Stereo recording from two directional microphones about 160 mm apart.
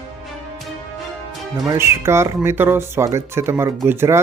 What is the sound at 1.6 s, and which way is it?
Speech, 20° right (ahead or behind).